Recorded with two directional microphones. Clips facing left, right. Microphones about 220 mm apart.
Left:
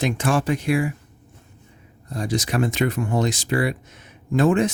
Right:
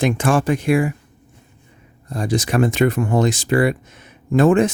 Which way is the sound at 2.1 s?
50° right (ahead or behind).